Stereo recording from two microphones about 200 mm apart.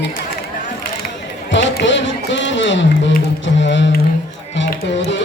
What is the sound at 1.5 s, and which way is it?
Run, 65° left (ahead or behind).